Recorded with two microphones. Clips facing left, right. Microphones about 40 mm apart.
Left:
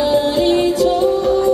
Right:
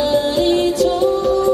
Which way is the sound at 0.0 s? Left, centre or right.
Centre.